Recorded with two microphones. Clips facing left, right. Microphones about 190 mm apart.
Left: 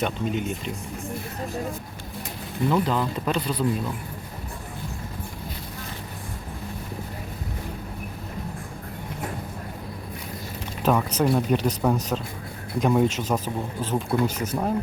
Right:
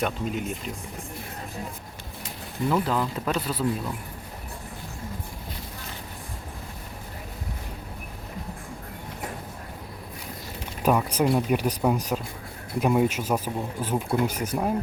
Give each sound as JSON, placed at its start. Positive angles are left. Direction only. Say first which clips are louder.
{"t": 0.0, "sound": "speech", "louder": "left 2 dB", "side_deg": 0}
{"t": 2.6, "sound": "speech", "louder": "left 1 dB", "side_deg": -5}
{"t": 10.8, "sound": "speech", "louder": "even", "side_deg": -10}